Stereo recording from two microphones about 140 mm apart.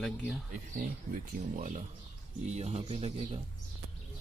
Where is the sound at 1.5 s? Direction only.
70° right (ahead or behind).